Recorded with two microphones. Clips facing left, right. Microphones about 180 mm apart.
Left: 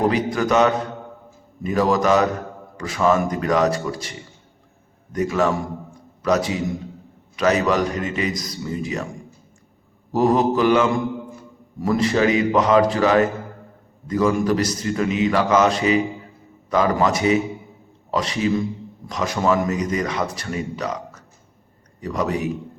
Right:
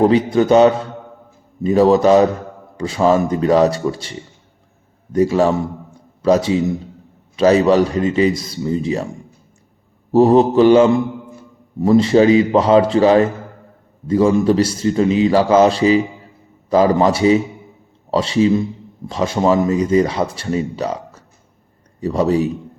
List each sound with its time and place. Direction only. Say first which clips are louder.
0.1 s a man's voice: right 7 dB; 30° right (ahead or behind)
10.1 s a man's voice: right 6 dB; 30° right (ahead or behind)